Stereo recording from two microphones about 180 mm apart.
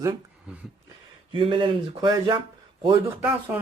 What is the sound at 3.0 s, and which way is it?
Speech, 10° right (ahead or behind).